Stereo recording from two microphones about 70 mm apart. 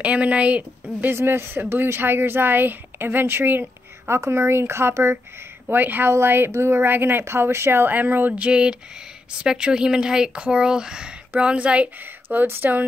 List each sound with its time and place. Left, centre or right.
0.0 s speech: centre
1.1 s speech: right